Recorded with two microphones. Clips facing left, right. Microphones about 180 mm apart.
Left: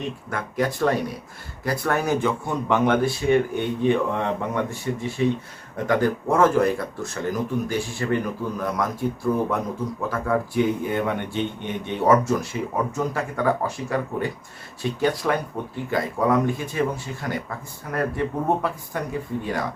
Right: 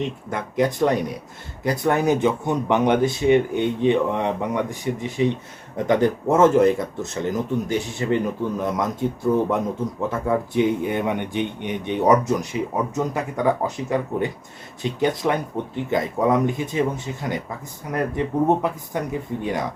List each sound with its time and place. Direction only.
0.0 s speech: 20° right (ahead or behind)